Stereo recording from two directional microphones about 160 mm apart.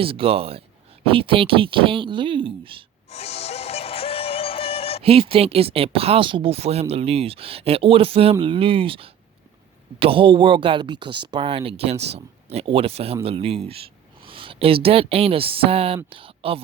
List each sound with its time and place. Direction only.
0.0 s speech: 35° right (ahead or behind)
3.1 s music: 40° left (ahead or behind)
5.0 s speech: 35° right (ahead or behind)